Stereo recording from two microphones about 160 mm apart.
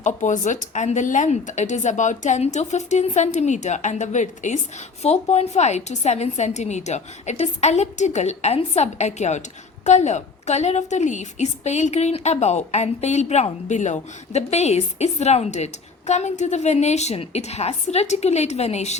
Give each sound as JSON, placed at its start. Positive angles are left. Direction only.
{"t": 0.0, "sound": "a woman's voice", "side_deg": 50}